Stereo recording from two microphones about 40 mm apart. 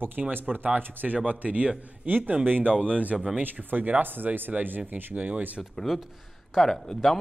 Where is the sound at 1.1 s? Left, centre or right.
Right.